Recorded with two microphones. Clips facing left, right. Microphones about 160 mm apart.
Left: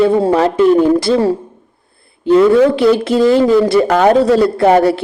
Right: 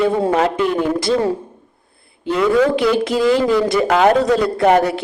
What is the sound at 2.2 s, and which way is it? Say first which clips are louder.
A woman's voice: left 6 dB; 35° left (ahead or behind).